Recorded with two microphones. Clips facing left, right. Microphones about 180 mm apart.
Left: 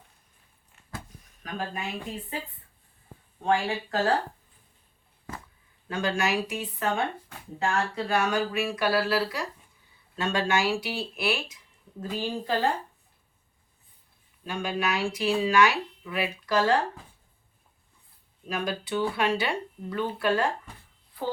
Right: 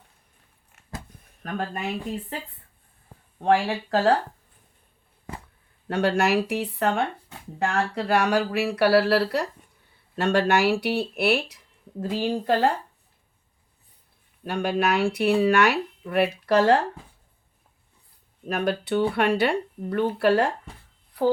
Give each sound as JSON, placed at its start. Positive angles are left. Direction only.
{"t": 1.4, "sound": "speech", "side_deg": -55}
{"t": 3.4, "sound": "speech", "side_deg": -65}
{"t": 5.9, "sound": "speech", "side_deg": -60}
{"t": 14.4, "sound": "speech", "side_deg": -60}
{"t": 18.4, "sound": "speech", "side_deg": -60}